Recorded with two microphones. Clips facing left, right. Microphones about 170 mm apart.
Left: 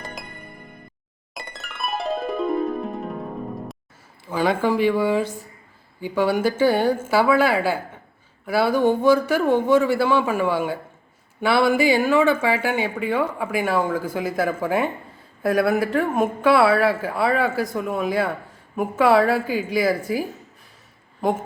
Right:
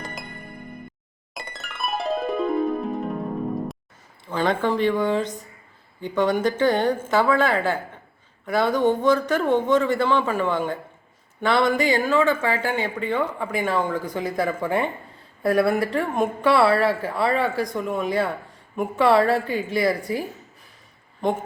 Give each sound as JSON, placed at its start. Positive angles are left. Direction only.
{"t": 0.0, "sound": "music", "side_deg": 0}
{"t": 1.3, "sound": "music", "side_deg": 0}
{"t": 4.3, "sound": "speech", "side_deg": 5}